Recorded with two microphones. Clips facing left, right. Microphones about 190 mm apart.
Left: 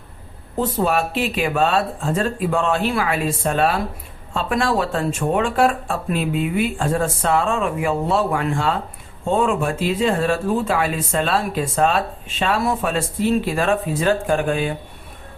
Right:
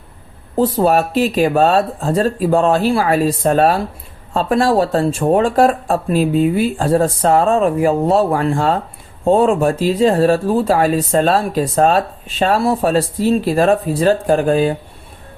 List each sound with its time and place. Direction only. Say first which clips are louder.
0.5 s speech: right 6 dB; 35° right (ahead or behind)